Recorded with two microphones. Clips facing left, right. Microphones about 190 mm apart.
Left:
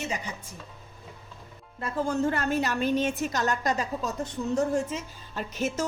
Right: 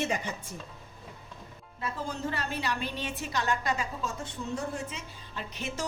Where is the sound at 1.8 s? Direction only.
50° left (ahead or behind).